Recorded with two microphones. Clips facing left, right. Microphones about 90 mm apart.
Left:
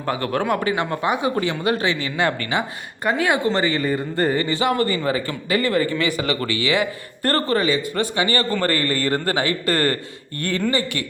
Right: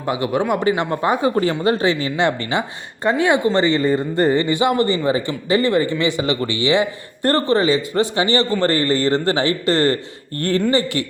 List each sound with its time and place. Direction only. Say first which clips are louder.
0.0 s speech: right 3 dB; 15° right (ahead or behind)
0.6 s a man's voice: right 3 dB; 25° right (ahead or behind)